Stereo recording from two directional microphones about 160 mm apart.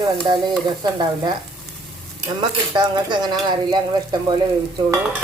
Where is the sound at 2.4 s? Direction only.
30° right (ahead or behind).